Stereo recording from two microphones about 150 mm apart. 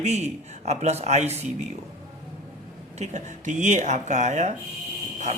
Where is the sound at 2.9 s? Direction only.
50° right (ahead or behind).